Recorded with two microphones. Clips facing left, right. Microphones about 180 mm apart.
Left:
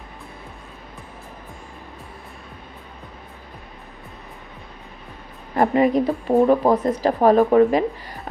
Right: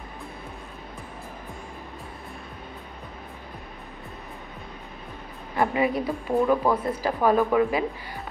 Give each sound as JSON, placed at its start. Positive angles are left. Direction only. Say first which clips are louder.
{"t": 5.6, "sound": "speech", "louder": "left 6 dB", "side_deg": 40}